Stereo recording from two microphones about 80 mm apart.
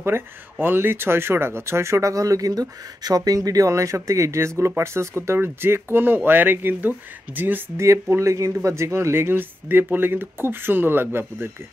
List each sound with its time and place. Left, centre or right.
0.0 s speech: right
7.8 s speech: right